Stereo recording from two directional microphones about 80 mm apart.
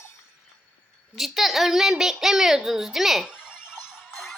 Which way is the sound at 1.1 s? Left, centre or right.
Centre.